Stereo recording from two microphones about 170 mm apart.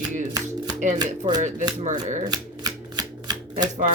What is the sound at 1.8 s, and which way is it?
Speech, 45° right (ahead or behind).